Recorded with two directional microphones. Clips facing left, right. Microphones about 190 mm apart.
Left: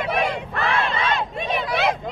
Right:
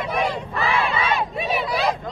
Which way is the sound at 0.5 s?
5° right (ahead or behind).